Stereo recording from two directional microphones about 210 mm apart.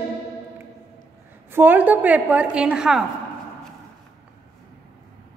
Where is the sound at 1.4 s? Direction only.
10° right (ahead or behind).